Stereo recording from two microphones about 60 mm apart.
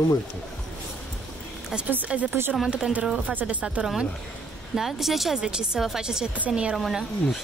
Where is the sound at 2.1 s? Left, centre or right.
Centre.